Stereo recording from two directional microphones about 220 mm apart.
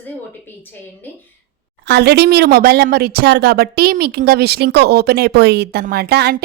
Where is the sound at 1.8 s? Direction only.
50° right (ahead or behind).